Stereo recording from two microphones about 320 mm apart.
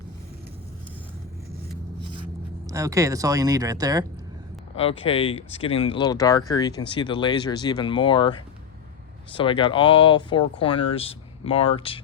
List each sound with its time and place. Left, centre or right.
2.6 s speech: centre
4.8 s speech: centre